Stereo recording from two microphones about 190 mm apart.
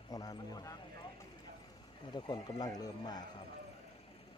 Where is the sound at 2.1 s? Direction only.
20° left (ahead or behind).